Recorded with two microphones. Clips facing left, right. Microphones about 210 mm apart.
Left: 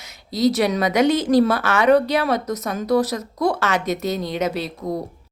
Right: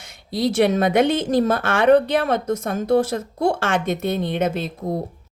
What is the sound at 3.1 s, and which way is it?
Speech, 30° right (ahead or behind).